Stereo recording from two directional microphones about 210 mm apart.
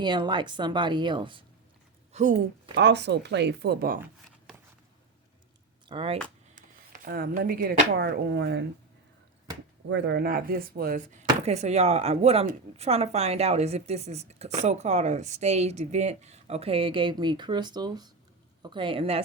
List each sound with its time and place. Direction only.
0.0 s a woman's voice: 20° right (ahead or behind)
2.1 s speech: 35° right (ahead or behind)
2.7 s speech: 55° right (ahead or behind)
5.9 s a woman's voice: 25° right (ahead or behind)
6.6 s speech: 40° right (ahead or behind)
9.9 s a woman's voice: 55° right (ahead or behind); by 19.2 s 25° right (ahead or behind)